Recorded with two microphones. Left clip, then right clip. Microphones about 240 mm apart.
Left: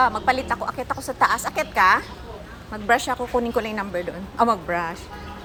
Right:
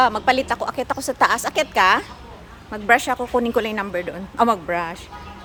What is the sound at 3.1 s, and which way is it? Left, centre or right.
A woman's voice, right.